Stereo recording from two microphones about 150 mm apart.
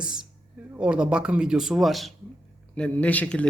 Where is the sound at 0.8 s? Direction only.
5° right (ahead or behind).